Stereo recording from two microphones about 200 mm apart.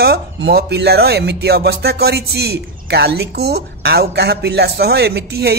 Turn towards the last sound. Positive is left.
turn(degrees=-55)  # may be behind; listen again after turning